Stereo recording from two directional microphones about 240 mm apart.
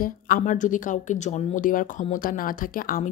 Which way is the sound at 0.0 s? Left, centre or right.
Left.